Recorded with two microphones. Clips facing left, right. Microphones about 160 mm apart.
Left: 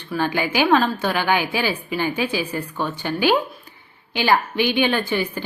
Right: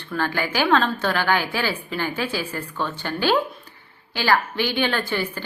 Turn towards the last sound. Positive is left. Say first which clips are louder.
# left 3 dB
turn(degrees=15)  # may be behind; listen again after turning